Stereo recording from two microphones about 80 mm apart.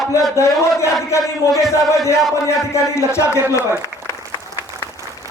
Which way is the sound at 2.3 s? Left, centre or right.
Left.